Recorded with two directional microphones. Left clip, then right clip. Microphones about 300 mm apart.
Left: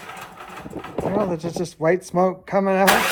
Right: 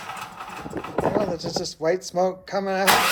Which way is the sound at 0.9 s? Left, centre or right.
Left.